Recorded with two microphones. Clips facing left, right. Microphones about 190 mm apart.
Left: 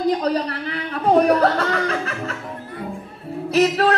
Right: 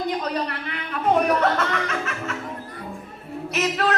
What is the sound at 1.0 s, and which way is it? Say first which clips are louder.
Music: left 4 dB; 35° left (ahead or behind).